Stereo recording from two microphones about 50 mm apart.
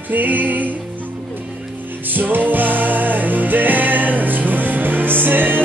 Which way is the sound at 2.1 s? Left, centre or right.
Right.